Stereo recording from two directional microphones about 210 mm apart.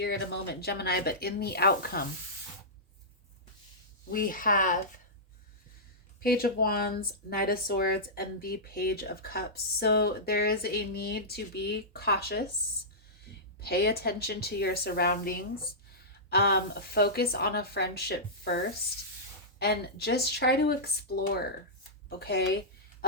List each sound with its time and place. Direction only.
0.0 s speech: 50° left (ahead or behind)
4.1 s speech: 40° left (ahead or behind)
6.1 s speech: 45° left (ahead or behind)
13.6 s speech: 50° left (ahead or behind)
22.2 s speech: 50° left (ahead or behind)